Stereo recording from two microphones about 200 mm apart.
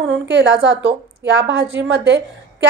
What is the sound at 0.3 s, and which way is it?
A woman's voice, 60° right (ahead or behind).